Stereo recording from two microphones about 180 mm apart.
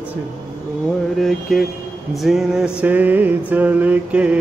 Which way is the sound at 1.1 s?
Centre (ahead or behind).